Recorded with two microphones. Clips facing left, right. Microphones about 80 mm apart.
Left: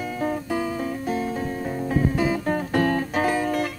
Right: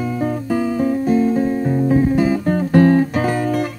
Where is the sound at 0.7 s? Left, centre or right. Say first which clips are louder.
Right 10 dB; right.